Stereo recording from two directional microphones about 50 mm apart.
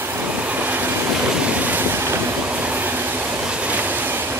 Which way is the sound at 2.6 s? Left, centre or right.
Right.